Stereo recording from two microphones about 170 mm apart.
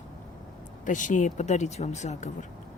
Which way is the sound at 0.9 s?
50° left (ahead or behind).